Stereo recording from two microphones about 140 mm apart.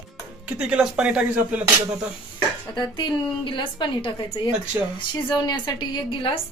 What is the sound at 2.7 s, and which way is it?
A woman's voice, 30° left (ahead or behind).